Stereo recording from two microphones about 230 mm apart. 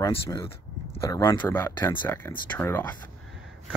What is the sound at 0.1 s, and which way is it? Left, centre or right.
Speech, centre.